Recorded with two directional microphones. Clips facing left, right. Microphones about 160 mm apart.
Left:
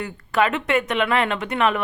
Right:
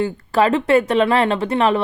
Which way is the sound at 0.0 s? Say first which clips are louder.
Right 5 dB; 30° right (ahead or behind).